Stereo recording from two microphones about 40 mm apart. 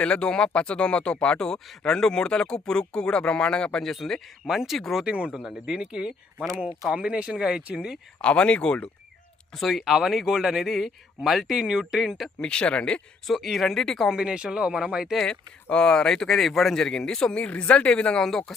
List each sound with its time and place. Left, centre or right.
0.0 s speech: left
3.8 s speech: centre
4.4 s speech: centre
5.0 s speech: right
5.3 s speech: centre
8.2 s speech: left
9.6 s speech: centre
11.5 s speech: centre
12.4 s speech: left
13.2 s speech: centre
14.1 s speech: centre
15.7 s speech: centre
16.7 s speech: centre
18.2 s speech: centre